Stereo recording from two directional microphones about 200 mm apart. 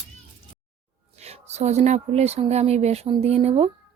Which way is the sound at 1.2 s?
35° right (ahead or behind).